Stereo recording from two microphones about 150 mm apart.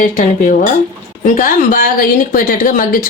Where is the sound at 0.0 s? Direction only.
60° left (ahead or behind).